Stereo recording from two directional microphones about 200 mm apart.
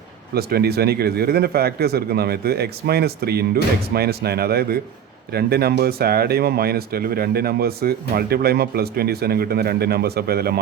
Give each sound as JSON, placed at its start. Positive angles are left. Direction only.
{"t": 0.3, "sound": "speech", "side_deg": -50}